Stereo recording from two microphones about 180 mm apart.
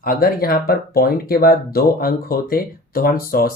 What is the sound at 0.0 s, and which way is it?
Speech, 50° left (ahead or behind).